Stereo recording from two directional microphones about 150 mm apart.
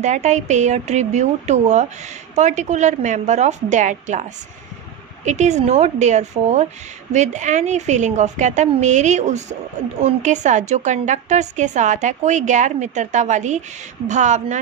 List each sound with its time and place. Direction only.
0.0 s speech: 50° right (ahead or behind)